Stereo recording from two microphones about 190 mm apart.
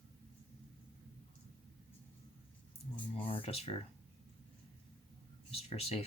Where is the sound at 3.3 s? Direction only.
30° left (ahead or behind).